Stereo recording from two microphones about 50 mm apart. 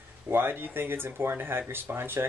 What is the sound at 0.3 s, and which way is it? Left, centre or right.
Speech, right.